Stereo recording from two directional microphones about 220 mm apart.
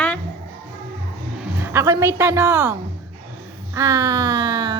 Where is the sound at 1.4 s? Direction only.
10° right (ahead or behind).